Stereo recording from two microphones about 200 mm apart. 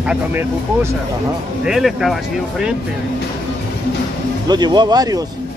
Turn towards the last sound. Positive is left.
turn(degrees=-20)  # may be behind; listen again after turning